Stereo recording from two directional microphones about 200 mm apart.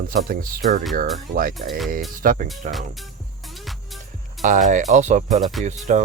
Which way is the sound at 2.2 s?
45° right (ahead or behind).